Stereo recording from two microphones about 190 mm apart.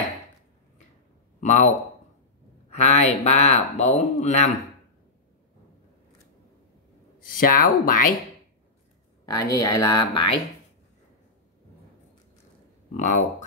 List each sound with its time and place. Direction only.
1.4 s a man's voice: 40° left (ahead or behind)
2.7 s speech: 35° left (ahead or behind)
7.2 s speech: 45° left (ahead or behind)
9.2 s speech: 20° left (ahead or behind)
12.9 s speech: 40° left (ahead or behind)